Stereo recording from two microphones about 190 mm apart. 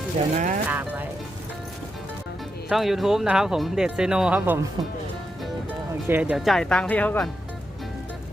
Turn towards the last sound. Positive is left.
turn(degrees=5)  # may be behind; listen again after turning